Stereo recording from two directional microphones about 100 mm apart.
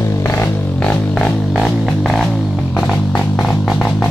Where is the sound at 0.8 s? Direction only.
5° left (ahead or behind).